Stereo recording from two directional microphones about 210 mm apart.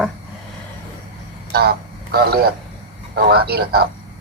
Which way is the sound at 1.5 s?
50° right (ahead or behind).